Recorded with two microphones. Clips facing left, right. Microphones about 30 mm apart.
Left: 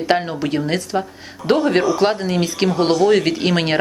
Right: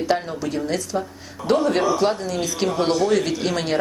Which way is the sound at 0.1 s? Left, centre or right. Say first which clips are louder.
Left 7 dB; left.